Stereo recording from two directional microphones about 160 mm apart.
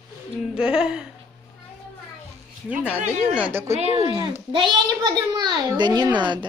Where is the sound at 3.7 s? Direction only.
40° right (ahead or behind).